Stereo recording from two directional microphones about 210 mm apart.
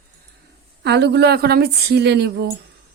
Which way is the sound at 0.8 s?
55° right (ahead or behind).